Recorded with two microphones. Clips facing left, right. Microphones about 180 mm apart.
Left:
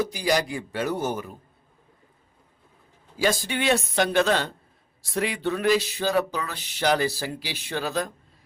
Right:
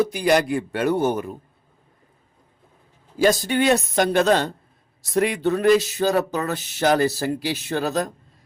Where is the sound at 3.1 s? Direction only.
45° right (ahead or behind).